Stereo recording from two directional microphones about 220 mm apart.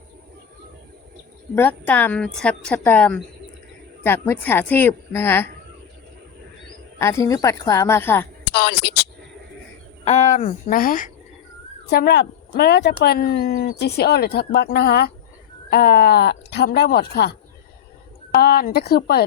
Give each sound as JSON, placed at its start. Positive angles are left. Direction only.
{"t": 1.5, "sound": "a woman's voice", "side_deg": 10}
{"t": 7.0, "sound": "a woman's voice", "side_deg": 15}
{"t": 8.4, "sound": "speech", "side_deg": 50}
{"t": 10.0, "sound": "speech", "side_deg": 30}
{"t": 18.3, "sound": "speech", "side_deg": 45}